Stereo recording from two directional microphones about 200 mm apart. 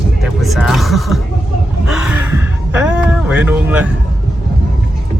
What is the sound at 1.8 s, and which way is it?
Heart sounds, 5° right (ahead or behind).